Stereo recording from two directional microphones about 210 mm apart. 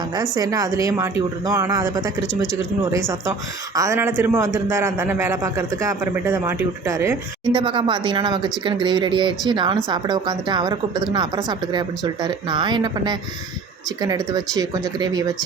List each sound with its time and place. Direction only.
0.1 s a man's voice: 15° right (ahead or behind)
2.2 s speech: centre (ahead or behind)
2.9 s a man's voice: 15° right (ahead or behind)
7.5 s a woman's voice: 25° right (ahead or behind)